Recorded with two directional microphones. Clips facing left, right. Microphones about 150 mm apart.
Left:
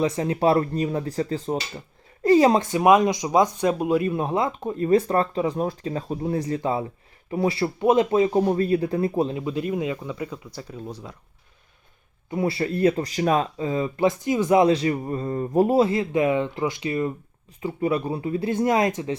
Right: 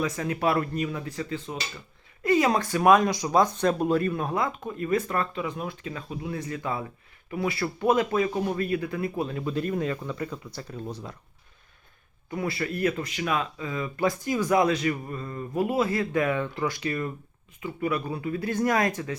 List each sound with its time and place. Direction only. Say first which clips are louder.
0.0 s speech: left 5 dB; 30° left (ahead or behind); by 4.1 s 10° left (ahead or behind)
4.1 s speech: left 4 dB; 25° left (ahead or behind)
9.3 s speech: left 2 dB; 15° left (ahead or behind)
12.3 s speech: left 5 dB; 30° left (ahead or behind)